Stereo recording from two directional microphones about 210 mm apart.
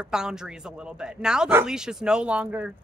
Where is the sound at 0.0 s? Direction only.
5° right (ahead or behind).